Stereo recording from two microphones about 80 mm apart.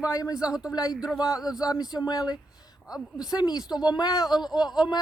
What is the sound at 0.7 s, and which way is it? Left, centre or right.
Speech, left.